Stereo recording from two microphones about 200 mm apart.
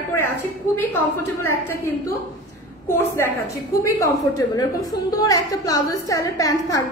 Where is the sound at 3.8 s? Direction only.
15° left (ahead or behind).